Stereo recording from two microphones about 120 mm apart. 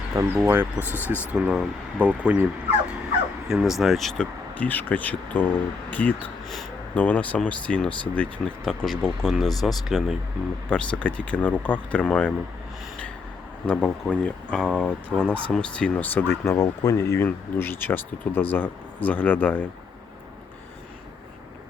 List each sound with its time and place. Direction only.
0.4 s speech: 20° right (ahead or behind)
3.5 s speech: 5° right (ahead or behind)
4.5 s speech: 15° left (ahead or behind)
13.7 s speech: 10° left (ahead or behind)